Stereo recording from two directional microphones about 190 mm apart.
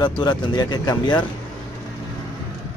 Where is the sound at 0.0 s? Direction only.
25° left (ahead or behind).